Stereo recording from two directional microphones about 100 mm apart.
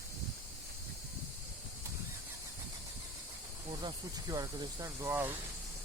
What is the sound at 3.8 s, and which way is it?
Speech, 40° right (ahead or behind).